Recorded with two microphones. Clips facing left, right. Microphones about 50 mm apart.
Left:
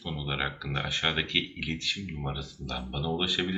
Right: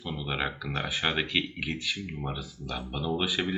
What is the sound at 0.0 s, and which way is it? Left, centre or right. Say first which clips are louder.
Speech: right 1 dB; centre.